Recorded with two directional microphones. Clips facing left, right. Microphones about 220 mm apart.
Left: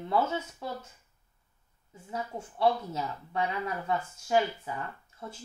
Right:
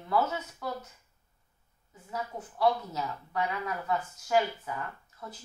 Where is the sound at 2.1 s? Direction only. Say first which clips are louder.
Left 1 dB; 25° left (ahead or behind).